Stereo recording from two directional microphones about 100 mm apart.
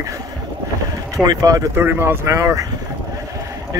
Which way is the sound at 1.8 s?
20° right (ahead or behind).